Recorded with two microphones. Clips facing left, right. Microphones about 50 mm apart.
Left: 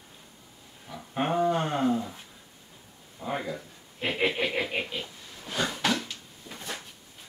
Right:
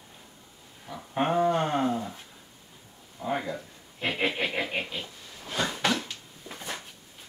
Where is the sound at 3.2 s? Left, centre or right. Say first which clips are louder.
Right 2 dB; centre.